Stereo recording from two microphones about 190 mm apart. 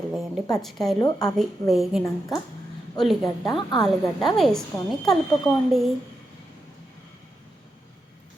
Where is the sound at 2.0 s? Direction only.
20° left (ahead or behind).